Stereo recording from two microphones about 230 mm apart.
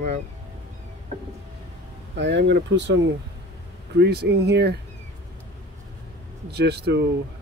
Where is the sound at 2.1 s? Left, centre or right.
Right.